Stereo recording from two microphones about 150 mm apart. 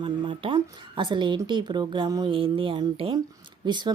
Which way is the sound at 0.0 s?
35° right (ahead or behind).